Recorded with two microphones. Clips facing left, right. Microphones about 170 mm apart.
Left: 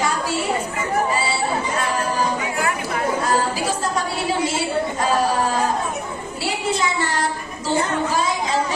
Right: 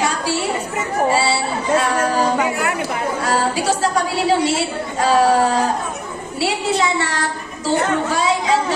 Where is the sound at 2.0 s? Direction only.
75° right (ahead or behind).